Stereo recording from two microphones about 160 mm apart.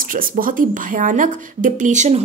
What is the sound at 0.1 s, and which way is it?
Speech, 60° right (ahead or behind).